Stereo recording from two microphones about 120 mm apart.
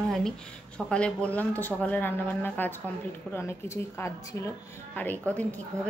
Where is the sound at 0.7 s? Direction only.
10° left (ahead or behind); by 4.5 s 25° left (ahead or behind).